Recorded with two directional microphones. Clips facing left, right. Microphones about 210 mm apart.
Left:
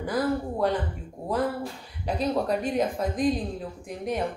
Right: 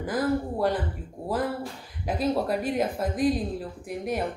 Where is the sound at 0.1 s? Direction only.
5° right (ahead or behind).